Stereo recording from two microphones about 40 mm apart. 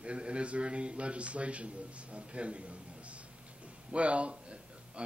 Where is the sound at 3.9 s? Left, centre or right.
Right.